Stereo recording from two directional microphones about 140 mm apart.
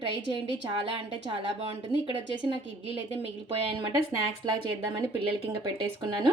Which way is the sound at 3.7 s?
35° right (ahead or behind).